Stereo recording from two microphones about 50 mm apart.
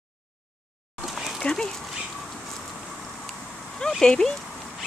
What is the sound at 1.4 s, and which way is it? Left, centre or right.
Speech, centre.